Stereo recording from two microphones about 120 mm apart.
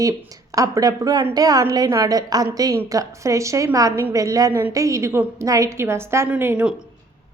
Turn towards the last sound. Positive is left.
turn(degrees=-15)  # may be behind; listen again after turning